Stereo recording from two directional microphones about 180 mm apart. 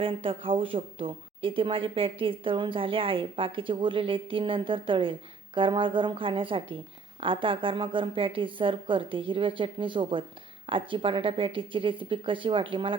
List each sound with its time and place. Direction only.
0.0 s speech: 30° right (ahead or behind)